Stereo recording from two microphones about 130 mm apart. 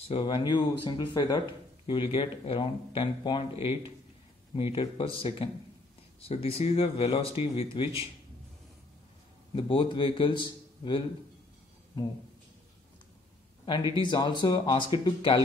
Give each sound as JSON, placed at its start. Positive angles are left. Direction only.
{"t": 0.1, "sound": "speech", "side_deg": 35}
{"t": 9.6, "sound": "speech", "side_deg": 40}
{"t": 13.9, "sound": "speech", "side_deg": 35}